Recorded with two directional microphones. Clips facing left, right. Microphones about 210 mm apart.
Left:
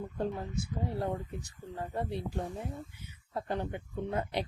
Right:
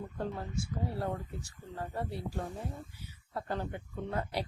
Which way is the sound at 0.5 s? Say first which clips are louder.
Left 1 dB; 20° left (ahead or behind).